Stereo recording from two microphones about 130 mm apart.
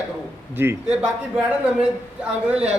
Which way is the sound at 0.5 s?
15° right (ahead or behind).